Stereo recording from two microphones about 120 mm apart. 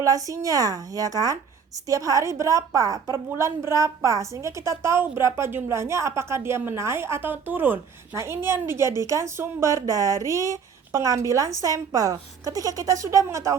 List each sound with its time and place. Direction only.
0.0 s a woman's voice: 25° right (ahead or behind)